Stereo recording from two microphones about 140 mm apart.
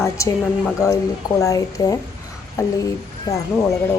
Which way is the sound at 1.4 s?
25° left (ahead or behind).